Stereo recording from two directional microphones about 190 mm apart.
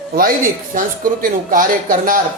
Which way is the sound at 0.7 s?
45° right (ahead or behind).